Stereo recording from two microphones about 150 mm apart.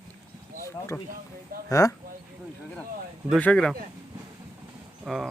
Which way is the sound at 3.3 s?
5° left (ahead or behind).